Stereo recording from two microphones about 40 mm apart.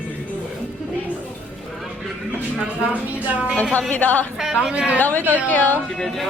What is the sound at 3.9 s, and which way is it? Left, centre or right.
Speech, left.